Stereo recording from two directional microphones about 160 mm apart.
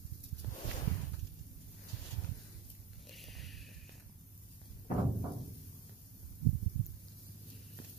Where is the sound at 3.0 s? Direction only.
Centre (ahead or behind).